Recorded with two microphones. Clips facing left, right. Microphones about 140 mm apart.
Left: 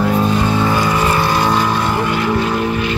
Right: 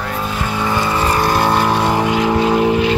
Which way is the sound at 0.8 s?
30° right (ahead or behind).